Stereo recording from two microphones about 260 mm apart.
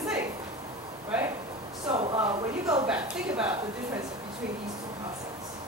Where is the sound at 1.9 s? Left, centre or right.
Right.